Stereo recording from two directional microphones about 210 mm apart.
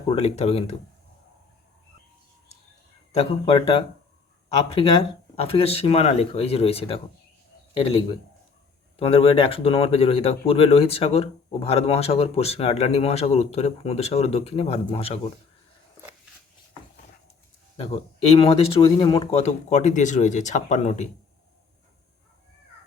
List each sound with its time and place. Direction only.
0.1 s speech: 30° left (ahead or behind)
3.1 s speech: 30° left (ahead or behind)
5.4 s speech: 30° left (ahead or behind)
17.7 s speech: 30° left (ahead or behind)